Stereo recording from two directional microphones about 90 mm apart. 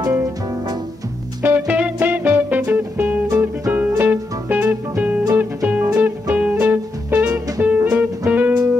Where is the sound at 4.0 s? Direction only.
20° right (ahead or behind).